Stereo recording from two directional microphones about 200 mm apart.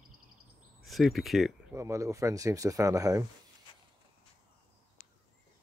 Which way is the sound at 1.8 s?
15° right (ahead or behind).